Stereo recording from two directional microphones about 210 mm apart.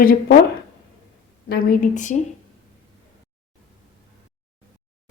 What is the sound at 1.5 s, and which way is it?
Speech, 40° left (ahead or behind).